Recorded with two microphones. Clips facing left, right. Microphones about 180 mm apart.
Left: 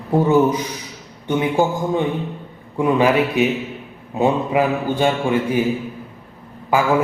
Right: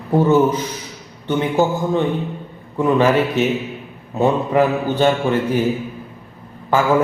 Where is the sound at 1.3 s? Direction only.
15° left (ahead or behind).